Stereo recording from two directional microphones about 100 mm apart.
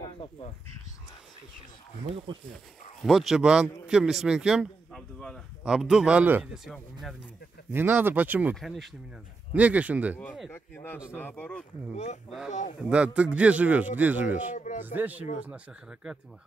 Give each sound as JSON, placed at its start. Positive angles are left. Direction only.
{"t": 3.0, "sound": "speech", "side_deg": 0}
{"t": 4.9, "sound": "speech", "side_deg": 5}
{"t": 5.6, "sound": "a man's voice", "side_deg": -5}
{"t": 6.5, "sound": "speech", "side_deg": 0}
{"t": 7.7, "sound": "speech", "side_deg": -20}
{"t": 8.5, "sound": "speech", "side_deg": 0}
{"t": 9.5, "sound": "a man's voice", "side_deg": -15}
{"t": 10.5, "sound": "a man's voice", "side_deg": 20}
{"t": 12.9, "sound": "a man's voice", "side_deg": -10}